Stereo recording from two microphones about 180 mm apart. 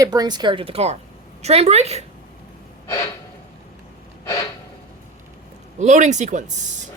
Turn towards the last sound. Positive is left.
turn(degrees=-40)  # may be behind; listen again after turning